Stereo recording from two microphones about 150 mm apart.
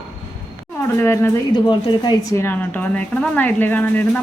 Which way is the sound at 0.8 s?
15° left (ahead or behind).